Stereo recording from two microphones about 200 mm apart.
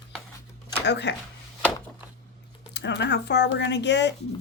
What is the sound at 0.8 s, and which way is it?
Speech, 60° left (ahead or behind).